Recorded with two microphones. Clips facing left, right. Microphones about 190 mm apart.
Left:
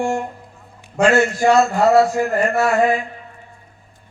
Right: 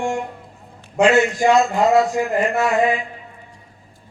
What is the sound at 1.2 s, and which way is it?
Speech, 15° right (ahead or behind).